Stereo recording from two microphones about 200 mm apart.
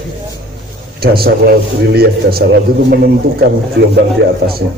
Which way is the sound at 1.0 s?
50° right (ahead or behind).